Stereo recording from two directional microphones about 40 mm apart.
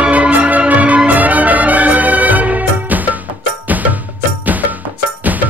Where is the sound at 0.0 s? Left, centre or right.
Right.